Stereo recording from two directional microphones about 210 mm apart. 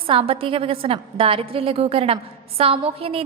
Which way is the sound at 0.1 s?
25° right (ahead or behind).